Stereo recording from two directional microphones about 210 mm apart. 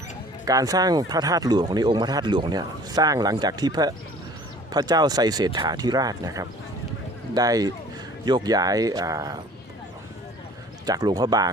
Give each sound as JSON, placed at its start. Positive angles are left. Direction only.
{"t": 0.4, "sound": "speech", "side_deg": -15}
{"t": 10.8, "sound": "speech", "side_deg": -20}